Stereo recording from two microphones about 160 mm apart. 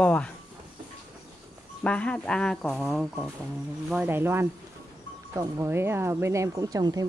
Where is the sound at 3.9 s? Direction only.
10° right (ahead or behind).